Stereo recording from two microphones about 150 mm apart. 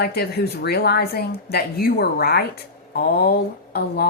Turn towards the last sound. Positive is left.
turn(degrees=90)